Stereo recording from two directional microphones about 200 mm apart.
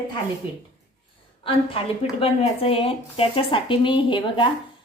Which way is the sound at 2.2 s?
30° left (ahead or behind).